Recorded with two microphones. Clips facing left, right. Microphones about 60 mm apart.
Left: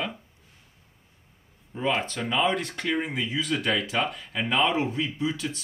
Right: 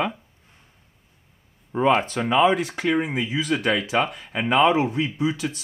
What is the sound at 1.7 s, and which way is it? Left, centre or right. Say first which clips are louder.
Speech: right 8 dB; right.